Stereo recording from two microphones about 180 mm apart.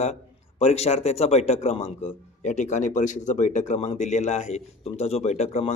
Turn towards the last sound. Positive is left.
turn(degrees=35)  # may be behind; listen again after turning